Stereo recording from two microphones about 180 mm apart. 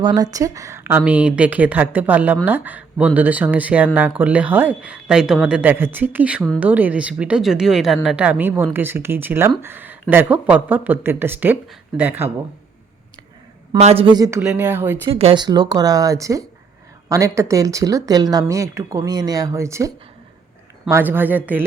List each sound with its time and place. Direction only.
0.0 s speech: 20° right (ahead or behind)
13.7 s speech: 35° right (ahead or behind); by 14.9 s 10° right (ahead or behind)
15.0 s speech: 30° right (ahead or behind); by 19.9 s 15° right (ahead or behind)
20.9 s speech: 10° right (ahead or behind)